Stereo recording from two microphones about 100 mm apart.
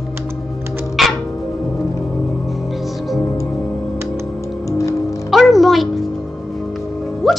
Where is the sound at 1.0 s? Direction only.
Centre (ahead or behind).